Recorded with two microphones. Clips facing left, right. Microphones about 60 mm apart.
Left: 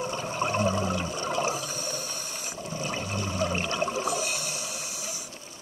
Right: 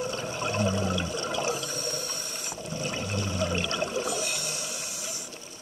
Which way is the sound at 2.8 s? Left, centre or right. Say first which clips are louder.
Even; left.